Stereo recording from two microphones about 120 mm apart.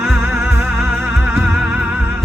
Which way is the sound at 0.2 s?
20° right (ahead or behind).